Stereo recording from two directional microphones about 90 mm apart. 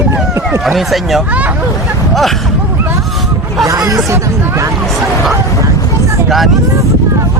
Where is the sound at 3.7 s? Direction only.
40° right (ahead or behind).